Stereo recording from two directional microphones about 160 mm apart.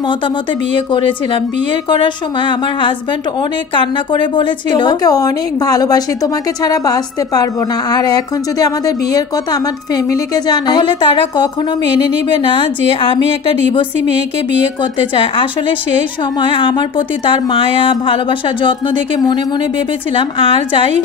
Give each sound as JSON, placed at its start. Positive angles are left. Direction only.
{"t": 0.7, "sound": "a woman's voice", "side_deg": 30}
{"t": 14.8, "sound": "speech", "side_deg": 30}